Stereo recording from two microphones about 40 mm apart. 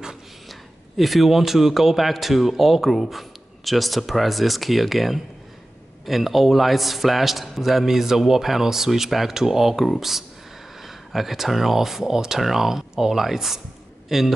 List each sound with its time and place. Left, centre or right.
0.5 s a man's voice: centre